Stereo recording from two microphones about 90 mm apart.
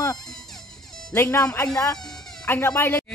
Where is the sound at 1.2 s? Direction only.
35° left (ahead or behind).